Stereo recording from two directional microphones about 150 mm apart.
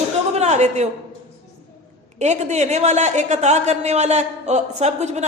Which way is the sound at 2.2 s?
50° right (ahead or behind).